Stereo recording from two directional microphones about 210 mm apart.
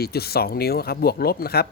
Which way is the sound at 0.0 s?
50° left (ahead or behind).